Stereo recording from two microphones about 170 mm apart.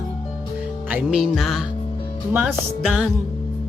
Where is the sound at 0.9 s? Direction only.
5° right (ahead or behind).